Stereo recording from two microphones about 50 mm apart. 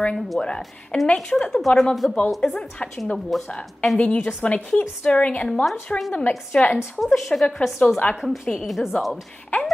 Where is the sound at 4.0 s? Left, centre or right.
Left.